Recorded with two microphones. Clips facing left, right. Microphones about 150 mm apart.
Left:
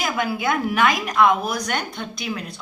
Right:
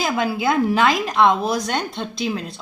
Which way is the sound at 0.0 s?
25° right (ahead or behind).